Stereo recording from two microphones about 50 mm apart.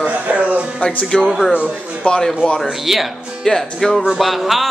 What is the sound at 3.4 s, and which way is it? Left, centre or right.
A man's voice, centre.